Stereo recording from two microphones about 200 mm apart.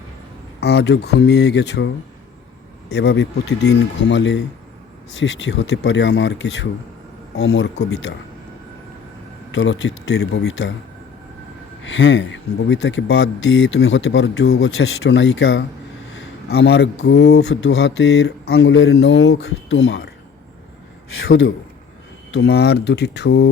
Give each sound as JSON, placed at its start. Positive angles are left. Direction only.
{"t": 0.6, "sound": "speech", "side_deg": 55}
{"t": 2.9, "sound": "speech", "side_deg": 55}
{"t": 9.5, "sound": "speech", "side_deg": 70}
{"t": 11.8, "sound": "speech", "side_deg": 65}
{"t": 22.3, "sound": "speech", "side_deg": 55}